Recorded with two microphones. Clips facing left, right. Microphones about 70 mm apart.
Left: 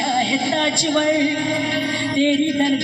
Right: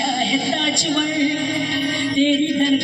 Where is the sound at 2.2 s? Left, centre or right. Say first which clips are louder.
Even; left.